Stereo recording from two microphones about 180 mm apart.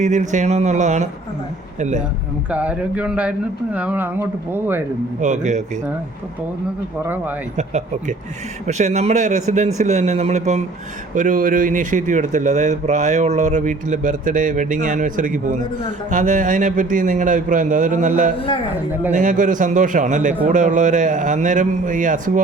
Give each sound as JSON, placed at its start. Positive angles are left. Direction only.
{"t": 0.0, "sound": "a man's voice", "side_deg": -40}
{"t": 2.5, "sound": "speech", "side_deg": -5}
{"t": 5.2, "sound": "a man's voice", "side_deg": -40}
{"t": 7.5, "sound": "a man's voice", "side_deg": -40}